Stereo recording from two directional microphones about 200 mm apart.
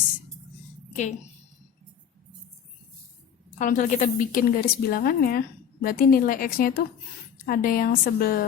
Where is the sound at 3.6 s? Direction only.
40° left (ahead or behind).